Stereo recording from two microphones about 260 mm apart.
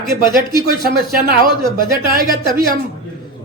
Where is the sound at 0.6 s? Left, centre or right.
Right.